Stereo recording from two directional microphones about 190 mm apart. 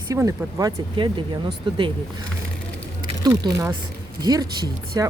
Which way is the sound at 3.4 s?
20° right (ahead or behind).